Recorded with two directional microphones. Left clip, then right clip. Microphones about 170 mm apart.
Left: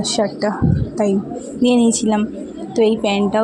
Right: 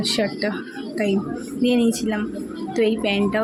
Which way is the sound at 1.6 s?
25° left (ahead or behind).